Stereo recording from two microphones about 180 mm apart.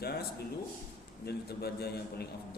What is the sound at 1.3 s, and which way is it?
A man's voice, 60° left (ahead or behind).